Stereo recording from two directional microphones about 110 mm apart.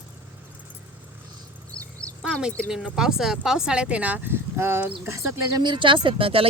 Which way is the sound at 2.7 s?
5° right (ahead or behind).